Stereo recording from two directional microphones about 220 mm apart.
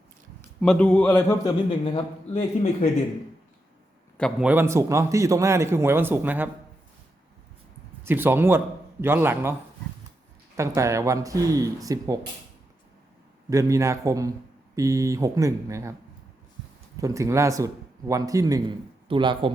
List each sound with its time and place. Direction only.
0.6 s a man's voice: 5° left (ahead or behind)
1.8 s a man's voice: 25° left (ahead or behind)
4.2 s a man's voice: 5° right (ahead or behind)
8.0 s a man's voice: 10° right (ahead or behind)
10.8 s a man's voice: 15° right (ahead or behind)
13.5 s a man's voice: 15° right (ahead or behind)
17.0 s a man's voice: 15° right (ahead or behind)